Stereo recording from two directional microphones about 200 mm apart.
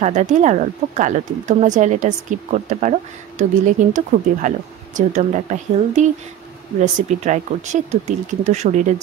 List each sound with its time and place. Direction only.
0.0 s speech: 35° right (ahead or behind)